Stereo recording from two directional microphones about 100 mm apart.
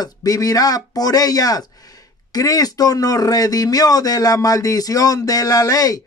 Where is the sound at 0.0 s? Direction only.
35° left (ahead or behind).